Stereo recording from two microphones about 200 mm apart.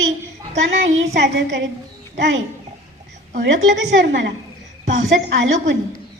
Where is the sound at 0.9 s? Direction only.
60° right (ahead or behind).